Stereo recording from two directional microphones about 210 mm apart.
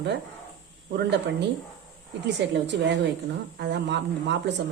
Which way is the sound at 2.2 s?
55° right (ahead or behind).